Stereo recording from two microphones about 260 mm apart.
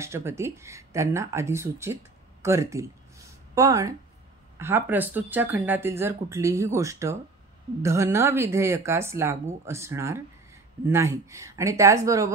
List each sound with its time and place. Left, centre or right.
0.0 s speech: centre
2.4 s a sound: centre
4.6 s speech: centre